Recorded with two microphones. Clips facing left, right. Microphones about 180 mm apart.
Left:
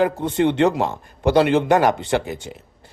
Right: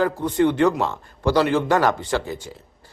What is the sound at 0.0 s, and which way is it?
A man's voice, 25° left (ahead or behind).